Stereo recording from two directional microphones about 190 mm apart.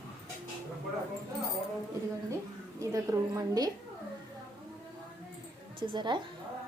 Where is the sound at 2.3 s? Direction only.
15° right (ahead or behind).